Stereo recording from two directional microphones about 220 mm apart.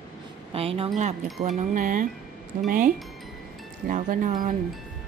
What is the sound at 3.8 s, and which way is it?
Speech, 35° right (ahead or behind).